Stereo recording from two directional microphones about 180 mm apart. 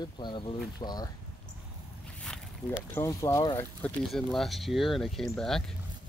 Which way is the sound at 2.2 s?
5° left (ahead or behind).